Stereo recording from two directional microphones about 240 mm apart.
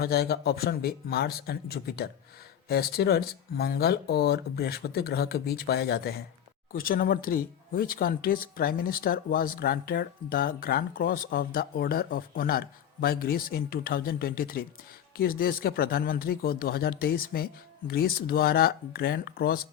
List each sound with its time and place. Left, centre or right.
0.0 s speech: left